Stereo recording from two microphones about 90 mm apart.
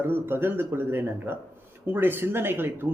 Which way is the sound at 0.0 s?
25° right (ahead or behind).